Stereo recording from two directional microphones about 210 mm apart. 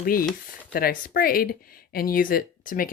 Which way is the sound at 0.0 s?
45° left (ahead or behind).